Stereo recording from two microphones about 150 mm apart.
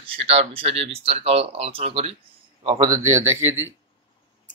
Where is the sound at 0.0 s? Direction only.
40° right (ahead or behind); by 3.5 s 15° right (ahead or behind).